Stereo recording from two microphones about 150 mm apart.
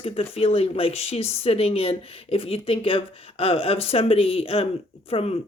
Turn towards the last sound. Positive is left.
turn(degrees=40)  # may be behind; listen again after turning